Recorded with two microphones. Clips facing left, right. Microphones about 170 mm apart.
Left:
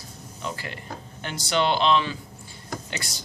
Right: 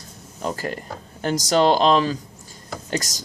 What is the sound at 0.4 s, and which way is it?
Speech, 40° right (ahead or behind).